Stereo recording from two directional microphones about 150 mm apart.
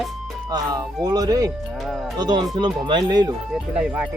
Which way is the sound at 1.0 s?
25° right (ahead or behind).